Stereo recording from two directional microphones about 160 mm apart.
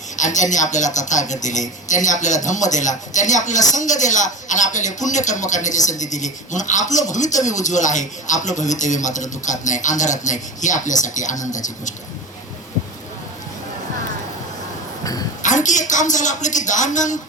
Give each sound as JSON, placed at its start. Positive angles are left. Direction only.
{"t": 0.2, "sound": "speech", "side_deg": 50}
{"t": 15.4, "sound": "speech", "side_deg": 50}